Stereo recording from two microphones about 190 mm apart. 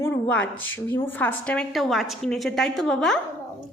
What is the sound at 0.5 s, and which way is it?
Speech, 90° left.